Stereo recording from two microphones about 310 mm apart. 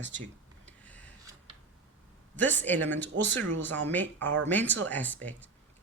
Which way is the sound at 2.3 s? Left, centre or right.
Centre.